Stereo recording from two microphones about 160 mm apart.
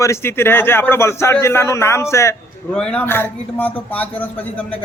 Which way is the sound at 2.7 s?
5° left (ahead or behind).